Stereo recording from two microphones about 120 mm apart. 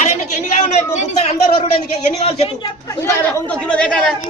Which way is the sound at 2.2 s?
55° left (ahead or behind).